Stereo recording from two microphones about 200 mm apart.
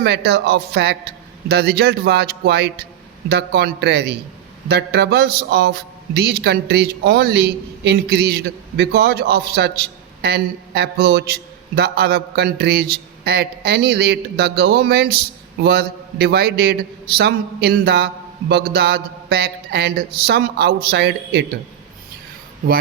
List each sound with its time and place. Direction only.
0.0 s a man's voice: 55° right (ahead or behind)